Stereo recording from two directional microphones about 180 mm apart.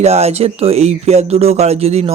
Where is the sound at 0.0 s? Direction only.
35° right (ahead or behind).